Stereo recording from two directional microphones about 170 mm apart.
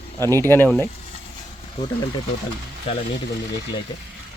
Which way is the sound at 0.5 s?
10° left (ahead or behind).